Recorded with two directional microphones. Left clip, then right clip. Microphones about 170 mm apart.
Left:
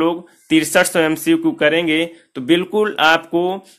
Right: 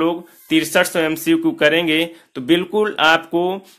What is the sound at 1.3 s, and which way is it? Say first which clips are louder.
Speech: right 2 dB; centre (ahead or behind).